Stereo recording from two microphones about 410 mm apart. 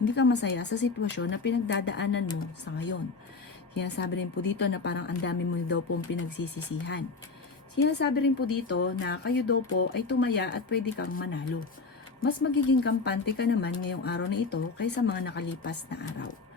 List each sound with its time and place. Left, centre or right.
0.1 s speech: left